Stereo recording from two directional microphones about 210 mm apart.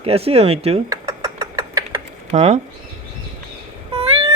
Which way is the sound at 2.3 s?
30° right (ahead or behind).